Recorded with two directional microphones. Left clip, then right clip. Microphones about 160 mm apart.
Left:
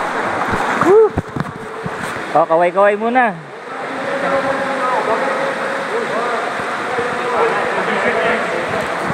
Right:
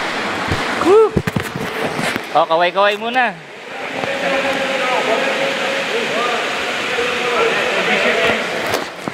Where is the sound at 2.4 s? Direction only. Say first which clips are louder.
Left 2 dB; 40° left (ahead or behind).